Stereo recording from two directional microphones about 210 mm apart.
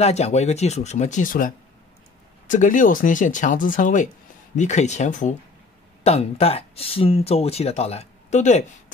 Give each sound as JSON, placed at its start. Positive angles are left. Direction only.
{"t": 0.0, "sound": "speech", "side_deg": 30}